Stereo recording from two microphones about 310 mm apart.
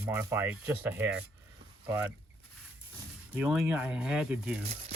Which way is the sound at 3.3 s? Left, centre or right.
Centre.